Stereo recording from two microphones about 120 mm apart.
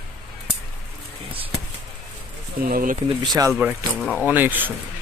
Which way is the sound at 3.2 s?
35° right (ahead or behind).